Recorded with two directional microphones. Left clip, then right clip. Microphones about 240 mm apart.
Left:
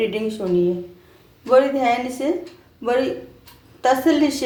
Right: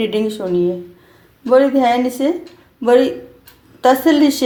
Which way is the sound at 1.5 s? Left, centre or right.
Right.